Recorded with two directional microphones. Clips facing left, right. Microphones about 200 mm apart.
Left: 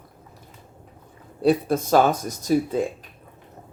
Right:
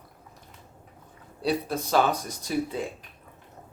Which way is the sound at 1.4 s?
50° left (ahead or behind).